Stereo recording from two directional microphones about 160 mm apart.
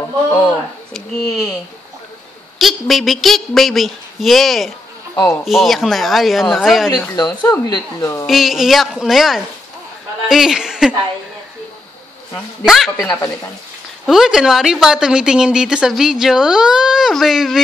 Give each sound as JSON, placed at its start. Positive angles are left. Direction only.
{"t": 0.3, "sound": "a woman's voice", "side_deg": 5}
{"t": 2.6, "sound": "a woman's voice", "side_deg": 0}
{"t": 7.2, "sound": "speech", "side_deg": 25}
{"t": 8.3, "sound": "a woman's voice", "side_deg": 0}
{"t": 12.6, "sound": "a woman's voice", "side_deg": 0}
{"t": 14.0, "sound": "a woman's voice", "side_deg": -5}